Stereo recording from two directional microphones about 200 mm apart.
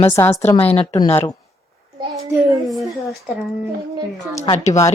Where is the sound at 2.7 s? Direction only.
Centre (ahead or behind).